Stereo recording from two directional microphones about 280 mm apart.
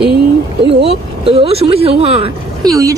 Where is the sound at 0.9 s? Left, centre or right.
Right.